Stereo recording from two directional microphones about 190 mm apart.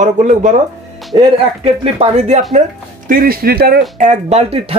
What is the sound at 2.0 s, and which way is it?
Speech, 35° right (ahead or behind).